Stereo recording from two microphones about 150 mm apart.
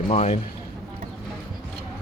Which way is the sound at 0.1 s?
45° left (ahead or behind).